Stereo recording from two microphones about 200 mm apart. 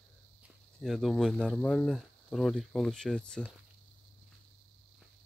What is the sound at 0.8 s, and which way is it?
Speech, centre (ahead or behind).